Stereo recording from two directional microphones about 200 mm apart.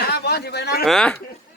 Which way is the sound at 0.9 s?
5° left (ahead or behind).